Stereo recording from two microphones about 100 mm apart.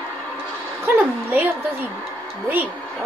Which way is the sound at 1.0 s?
20° right (ahead or behind).